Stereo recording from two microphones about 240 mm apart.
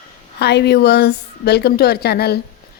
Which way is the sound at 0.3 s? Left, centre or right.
Left.